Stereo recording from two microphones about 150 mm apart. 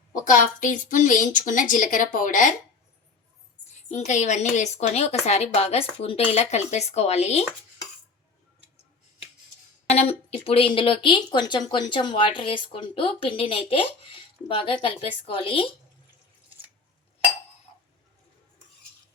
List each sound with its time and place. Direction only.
0.1 s a woman's voice: 60° left (ahead or behind)
3.8 s speech: 50° left (ahead or behind)
9.9 s a woman's voice: 45° left (ahead or behind)